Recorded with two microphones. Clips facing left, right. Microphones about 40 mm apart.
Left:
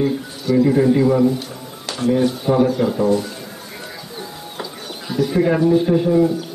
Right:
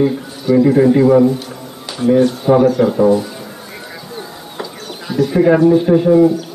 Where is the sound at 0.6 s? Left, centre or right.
Centre.